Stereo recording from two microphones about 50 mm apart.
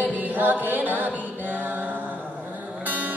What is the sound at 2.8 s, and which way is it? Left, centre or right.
Music, right.